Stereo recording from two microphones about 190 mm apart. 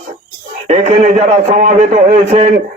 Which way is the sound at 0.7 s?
40° right (ahead or behind).